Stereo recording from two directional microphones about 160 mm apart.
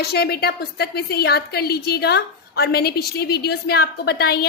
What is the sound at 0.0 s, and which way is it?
A woman's voice, 85° left.